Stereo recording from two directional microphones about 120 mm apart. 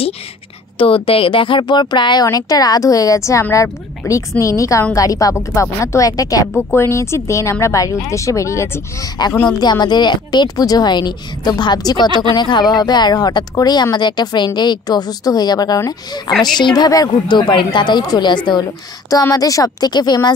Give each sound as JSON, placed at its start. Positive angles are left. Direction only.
{"t": 0.7, "sound": "speech", "side_deg": 50}
{"t": 16.3, "sound": "a woman's voice", "side_deg": 5}
{"t": 16.5, "sound": "speech", "side_deg": 35}